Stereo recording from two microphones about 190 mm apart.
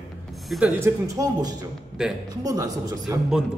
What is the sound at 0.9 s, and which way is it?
Speech, 20° right (ahead or behind).